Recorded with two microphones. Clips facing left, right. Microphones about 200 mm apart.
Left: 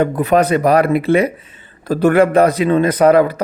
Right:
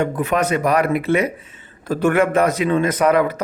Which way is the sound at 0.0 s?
35° left (ahead or behind).